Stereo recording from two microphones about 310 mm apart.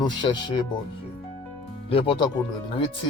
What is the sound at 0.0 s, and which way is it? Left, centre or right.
Speech, centre.